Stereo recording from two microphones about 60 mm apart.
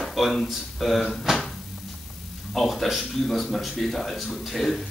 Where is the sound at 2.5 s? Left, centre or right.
Centre.